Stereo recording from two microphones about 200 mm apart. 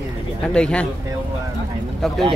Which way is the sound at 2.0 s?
Centre (ahead or behind).